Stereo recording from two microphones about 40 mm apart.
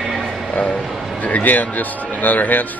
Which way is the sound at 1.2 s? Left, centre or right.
Left.